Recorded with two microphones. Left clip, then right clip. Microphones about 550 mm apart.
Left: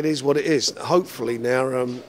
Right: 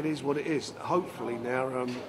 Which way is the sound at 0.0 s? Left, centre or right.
Left.